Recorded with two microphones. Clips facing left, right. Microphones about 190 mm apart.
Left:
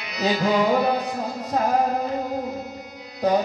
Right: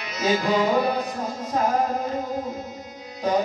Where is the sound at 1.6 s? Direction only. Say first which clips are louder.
Left 1 dB; 35° left (ahead or behind).